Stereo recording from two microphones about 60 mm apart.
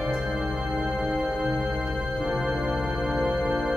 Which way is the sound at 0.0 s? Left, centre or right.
Centre.